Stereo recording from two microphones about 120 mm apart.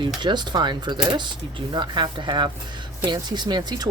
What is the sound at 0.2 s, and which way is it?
Speech, 40° right (ahead or behind).